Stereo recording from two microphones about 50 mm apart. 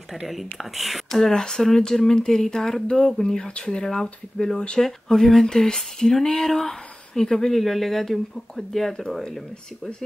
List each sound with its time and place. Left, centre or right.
0.3 s speech: centre